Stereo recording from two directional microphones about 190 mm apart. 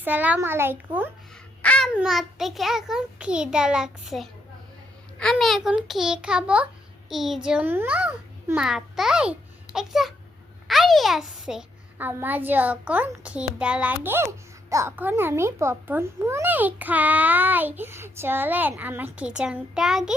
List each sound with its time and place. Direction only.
0.0 s a child's voice: 10° right (ahead or behind)
1.6 s babbling: 5° left (ahead or behind)
2.0 s a child's voice: centre (ahead or behind)